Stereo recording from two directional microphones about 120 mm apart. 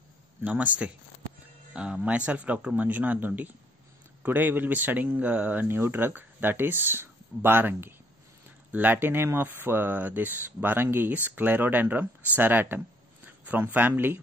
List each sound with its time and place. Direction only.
0.4 s speech: 10° right (ahead or behind)